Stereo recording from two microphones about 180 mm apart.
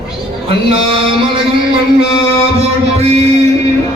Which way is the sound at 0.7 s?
30° right (ahead or behind).